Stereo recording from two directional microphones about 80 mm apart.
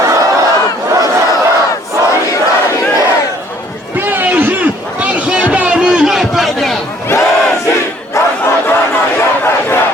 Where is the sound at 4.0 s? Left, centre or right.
Right; by 6.8 s centre.